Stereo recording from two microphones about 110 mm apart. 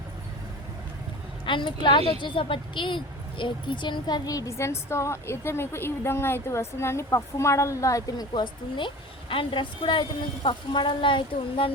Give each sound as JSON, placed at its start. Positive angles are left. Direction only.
{"t": 1.5, "sound": "a woman's voice", "side_deg": 45}
{"t": 8.3, "sound": "a woman's voice", "side_deg": 45}